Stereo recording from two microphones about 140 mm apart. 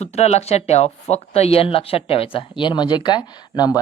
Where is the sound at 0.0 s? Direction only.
50° left (ahead or behind).